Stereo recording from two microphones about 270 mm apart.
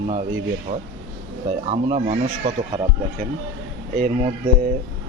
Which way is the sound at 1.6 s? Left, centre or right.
Right.